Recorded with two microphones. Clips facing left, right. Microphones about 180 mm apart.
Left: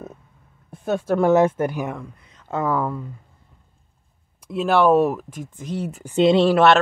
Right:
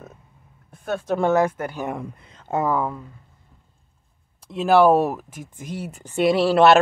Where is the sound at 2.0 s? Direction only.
25° right (ahead or behind).